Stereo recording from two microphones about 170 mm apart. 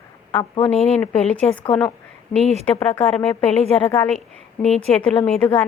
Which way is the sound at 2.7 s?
35° left (ahead or behind).